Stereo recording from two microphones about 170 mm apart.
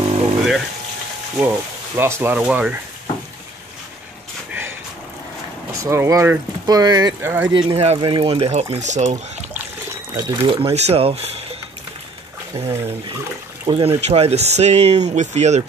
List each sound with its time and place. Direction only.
0.0 s frying: 35° right (ahead or behind)
2.0 s speech: 15° right (ahead or behind)
4.5 s a sound: 10° right (ahead or behind)
5.8 s speech: 15° right (ahead or behind)
7.5 s speech: 35° right (ahead or behind)
10.1 s speech: 25° right (ahead or behind)
12.5 s speech: 35° right (ahead or behind)